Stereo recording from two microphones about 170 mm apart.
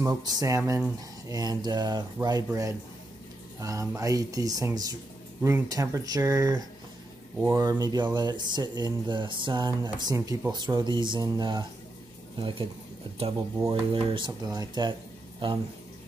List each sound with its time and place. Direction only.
0.0 s speech: 25° right (ahead or behind)